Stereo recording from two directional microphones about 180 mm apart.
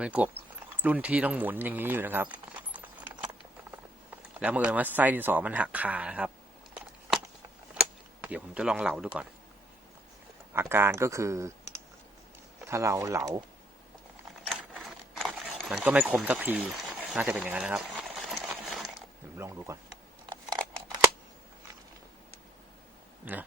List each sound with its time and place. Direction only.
0.0 s speech: 10° right (ahead or behind)
2.7 s keys jangling: 10° right (ahead or behind)
4.4 s speech: 5° right (ahead or behind)
7.7 s speech: 5° right (ahead or behind)
10.5 s speech: 15° right (ahead or behind)
12.6 s speech: 15° right (ahead or behind)
14.4 s a sound: centre (ahead or behind)
19.4 s speech: 15° right (ahead or behind)
20.5 s scissors: 15° right (ahead or behind)
23.3 s speech: 10° right (ahead or behind)